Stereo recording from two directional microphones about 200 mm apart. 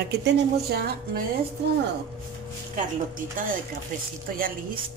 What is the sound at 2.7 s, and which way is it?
Speech, 40° right (ahead or behind).